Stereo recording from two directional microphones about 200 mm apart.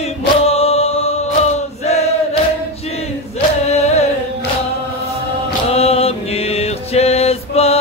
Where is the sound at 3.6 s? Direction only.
30° left (ahead or behind).